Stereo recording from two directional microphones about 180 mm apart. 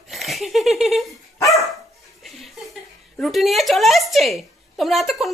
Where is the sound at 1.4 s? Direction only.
20° left (ahead or behind).